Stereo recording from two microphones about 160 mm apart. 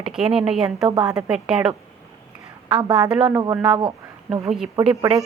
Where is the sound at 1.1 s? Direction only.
5° right (ahead or behind).